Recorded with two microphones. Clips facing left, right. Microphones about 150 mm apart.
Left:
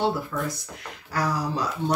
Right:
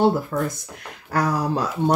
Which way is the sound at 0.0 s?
50° right (ahead or behind).